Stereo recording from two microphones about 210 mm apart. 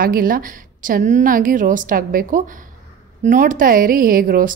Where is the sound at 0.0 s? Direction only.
45° right (ahead or behind).